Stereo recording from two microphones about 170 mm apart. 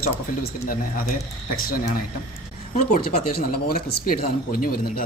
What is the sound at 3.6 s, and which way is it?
Speech, 65° left (ahead or behind).